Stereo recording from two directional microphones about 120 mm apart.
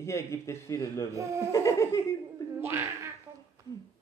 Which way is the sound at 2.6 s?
20° right (ahead or behind).